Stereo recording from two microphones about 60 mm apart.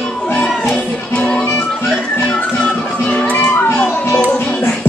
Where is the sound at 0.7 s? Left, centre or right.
Centre.